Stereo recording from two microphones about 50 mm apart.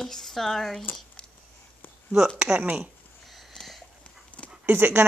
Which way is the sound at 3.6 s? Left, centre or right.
Centre.